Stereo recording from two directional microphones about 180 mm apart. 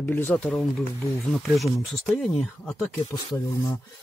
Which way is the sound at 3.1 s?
20° left (ahead or behind).